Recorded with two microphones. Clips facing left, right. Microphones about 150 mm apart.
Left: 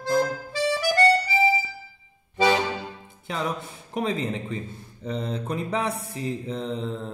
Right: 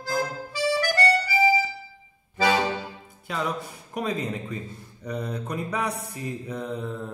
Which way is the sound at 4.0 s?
25° left (ahead or behind).